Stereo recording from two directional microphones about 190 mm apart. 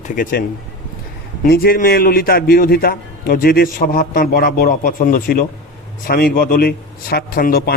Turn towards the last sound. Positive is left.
turn(degrees=50)  # may be behind; listen again after turning